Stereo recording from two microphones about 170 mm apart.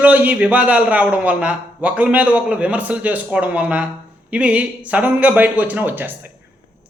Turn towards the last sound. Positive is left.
turn(degrees=-10)  # may be behind; listen again after turning